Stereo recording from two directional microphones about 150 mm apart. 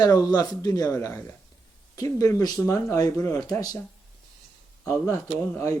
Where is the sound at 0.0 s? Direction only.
25° left (ahead or behind).